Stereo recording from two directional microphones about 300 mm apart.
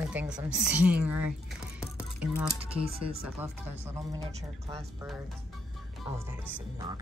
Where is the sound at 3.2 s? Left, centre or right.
Centre.